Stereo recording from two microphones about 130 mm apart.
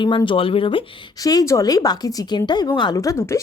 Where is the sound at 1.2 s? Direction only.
30° left (ahead or behind).